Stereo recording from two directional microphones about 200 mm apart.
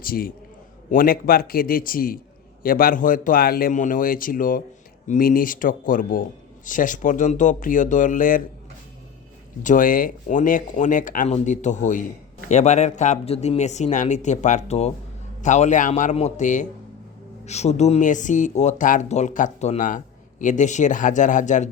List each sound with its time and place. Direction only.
0.0 s speech: 45° left (ahead or behind)
9.6 s speech: 45° left (ahead or behind)